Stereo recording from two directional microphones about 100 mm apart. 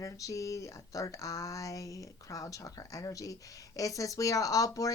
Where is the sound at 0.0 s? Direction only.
35° left (ahead or behind).